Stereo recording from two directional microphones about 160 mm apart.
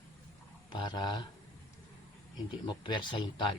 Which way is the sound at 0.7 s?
30° left (ahead or behind).